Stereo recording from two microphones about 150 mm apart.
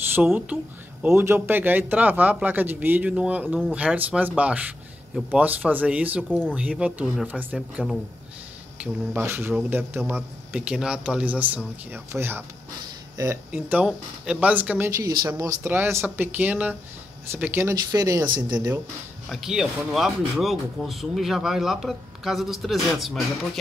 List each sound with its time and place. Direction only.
0.1 s a man's voice: 10° right (ahead or behind)
13.5 s a man's voice: 10° right (ahead or behind)
15.0 s a man's voice: 20° right (ahead or behind)
19.2 s speech: 5° right (ahead or behind)